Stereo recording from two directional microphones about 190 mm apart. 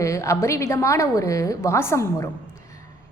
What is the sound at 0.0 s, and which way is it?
A woman's voice, 15° left (ahead or behind).